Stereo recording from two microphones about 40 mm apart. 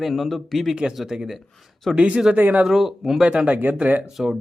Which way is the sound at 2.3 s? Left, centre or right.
Right.